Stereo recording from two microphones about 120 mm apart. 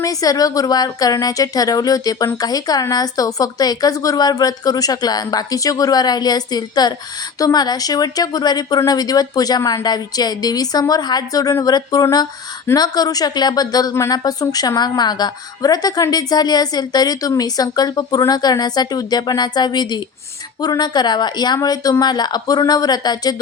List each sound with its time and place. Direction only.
0.0 s a woman's voice: 30° left (ahead or behind)